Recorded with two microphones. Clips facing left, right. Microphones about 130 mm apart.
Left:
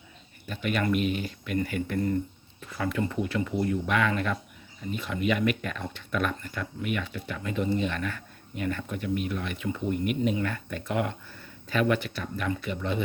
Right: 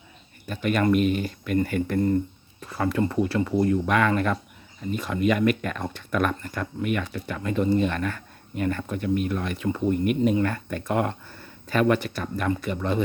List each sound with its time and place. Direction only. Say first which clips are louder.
0.4 s speech: right 5 dB; 45° right (ahead or behind)